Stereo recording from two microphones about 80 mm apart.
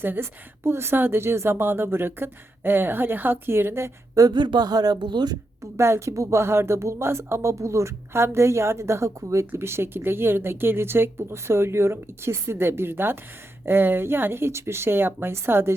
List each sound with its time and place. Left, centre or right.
0.0 s speech: right
4.3 s speech: right
5.7 s speech: right